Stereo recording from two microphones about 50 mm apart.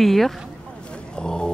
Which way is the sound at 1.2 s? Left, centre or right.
Centre.